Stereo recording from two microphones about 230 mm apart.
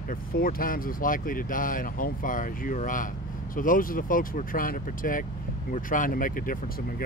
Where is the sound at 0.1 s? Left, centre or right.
Left.